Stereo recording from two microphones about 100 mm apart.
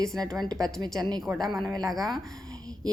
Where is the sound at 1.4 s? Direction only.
5° left (ahead or behind).